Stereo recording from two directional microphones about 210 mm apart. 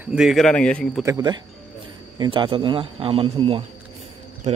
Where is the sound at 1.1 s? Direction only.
20° right (ahead or behind).